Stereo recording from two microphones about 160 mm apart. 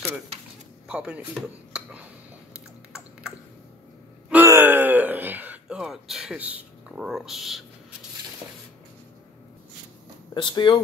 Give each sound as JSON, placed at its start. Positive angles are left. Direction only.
{"t": 0.8, "sound": "speech", "side_deg": -5}
{"t": 1.7, "sound": "a sound", "side_deg": -10}
{"t": 4.3, "sound": "gasp", "side_deg": -15}
{"t": 10.3, "sound": "speech", "side_deg": 30}